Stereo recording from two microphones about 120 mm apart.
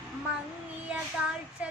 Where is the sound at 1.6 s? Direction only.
10° right (ahead or behind).